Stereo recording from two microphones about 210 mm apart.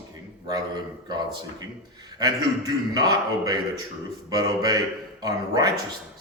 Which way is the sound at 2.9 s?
20° right (ahead or behind).